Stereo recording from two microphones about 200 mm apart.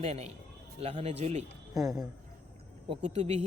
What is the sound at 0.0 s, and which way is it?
Speech, 30° right (ahead or behind).